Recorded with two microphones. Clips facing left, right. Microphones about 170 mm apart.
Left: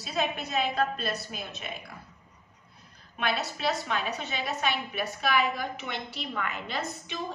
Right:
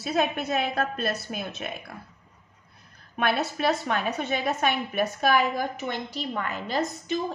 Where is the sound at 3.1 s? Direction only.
55° right (ahead or behind).